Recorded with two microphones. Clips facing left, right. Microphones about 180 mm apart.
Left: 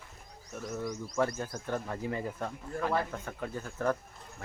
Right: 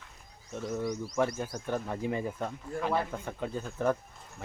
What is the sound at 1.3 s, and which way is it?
Speech, 10° right (ahead or behind).